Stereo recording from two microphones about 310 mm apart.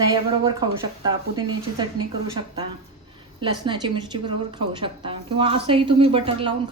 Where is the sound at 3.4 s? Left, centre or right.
Centre.